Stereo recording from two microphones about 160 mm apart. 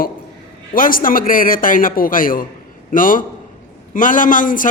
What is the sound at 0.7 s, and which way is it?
A man's voice, 60° left (ahead or behind).